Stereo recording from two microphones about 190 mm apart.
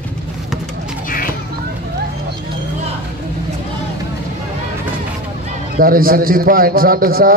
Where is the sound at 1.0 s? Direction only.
50° left (ahead or behind).